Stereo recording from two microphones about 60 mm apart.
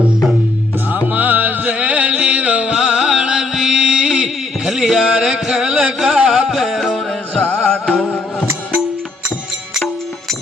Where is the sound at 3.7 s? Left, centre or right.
Right.